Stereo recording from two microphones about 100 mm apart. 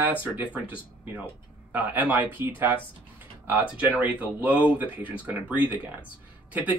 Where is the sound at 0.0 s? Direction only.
15° right (ahead or behind).